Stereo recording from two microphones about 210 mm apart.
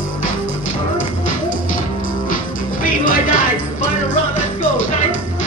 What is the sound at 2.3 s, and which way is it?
Music, 40° left (ahead or behind).